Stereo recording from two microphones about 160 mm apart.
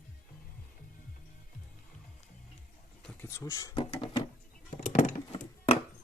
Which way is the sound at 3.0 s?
15° left (ahead or behind).